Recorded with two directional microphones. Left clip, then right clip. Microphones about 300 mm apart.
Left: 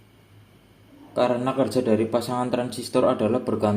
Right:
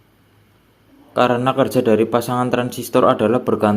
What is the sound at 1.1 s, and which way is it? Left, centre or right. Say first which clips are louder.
Speech: right 6 dB; right.